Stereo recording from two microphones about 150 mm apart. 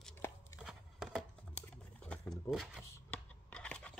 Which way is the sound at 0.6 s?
Centre (ahead or behind).